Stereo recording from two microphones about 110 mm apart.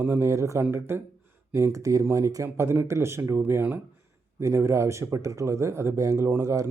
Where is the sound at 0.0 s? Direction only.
25° right (ahead or behind).